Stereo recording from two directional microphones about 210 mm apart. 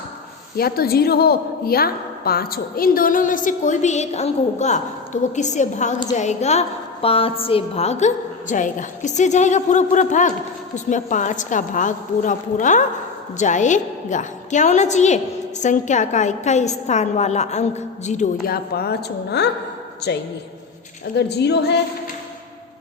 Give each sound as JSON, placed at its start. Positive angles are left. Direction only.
{"t": 0.5, "sound": "a woman's voice", "side_deg": 45}